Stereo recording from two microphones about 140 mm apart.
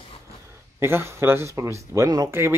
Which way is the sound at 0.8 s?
20° right (ahead or behind).